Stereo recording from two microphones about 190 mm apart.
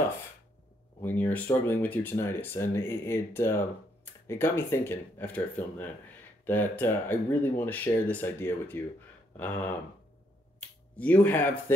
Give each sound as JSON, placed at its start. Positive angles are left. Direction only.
{"t": 1.0, "sound": "speech", "side_deg": 10}
{"t": 11.0, "sound": "speech", "side_deg": 10}